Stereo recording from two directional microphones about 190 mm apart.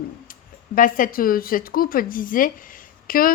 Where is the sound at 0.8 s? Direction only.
45° left (ahead or behind).